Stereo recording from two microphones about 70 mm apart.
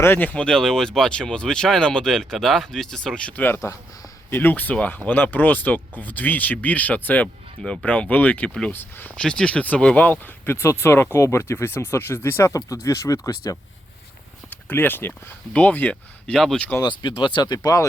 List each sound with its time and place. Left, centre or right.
0.0 s speech: left
0.3 s speech: centre
3.6 s speech: left
4.3 s speech: left
7.6 s speech: centre
8.4 s speech: centre
8.7 s speech: left
9.1 s speech: centre
10.0 s speech: left
12.5 s speech: left
14.5 s speech: left
16.4 s speech: centre
16.8 s speech: left